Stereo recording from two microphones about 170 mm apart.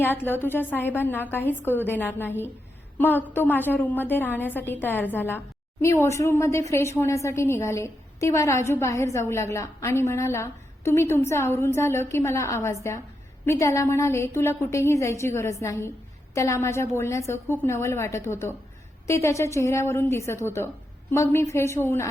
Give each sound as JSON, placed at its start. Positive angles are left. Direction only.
{"t": 0.0, "sound": "a woman's voice", "side_deg": 10}